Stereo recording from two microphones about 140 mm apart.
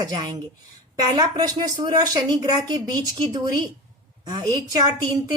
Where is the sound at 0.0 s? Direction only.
30° right (ahead or behind).